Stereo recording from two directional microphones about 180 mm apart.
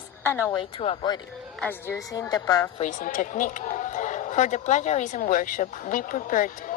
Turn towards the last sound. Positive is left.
turn(degrees=45)  # may be behind; listen again after turning